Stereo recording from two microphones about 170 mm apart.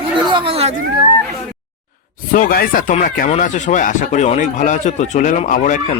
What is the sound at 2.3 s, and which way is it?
A man's voice, 55° left (ahead or behind).